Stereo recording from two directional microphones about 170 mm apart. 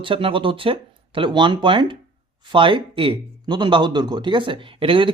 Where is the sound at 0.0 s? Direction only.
30° right (ahead or behind).